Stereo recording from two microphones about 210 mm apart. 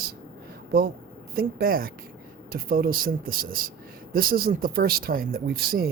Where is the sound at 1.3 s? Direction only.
45° right (ahead or behind).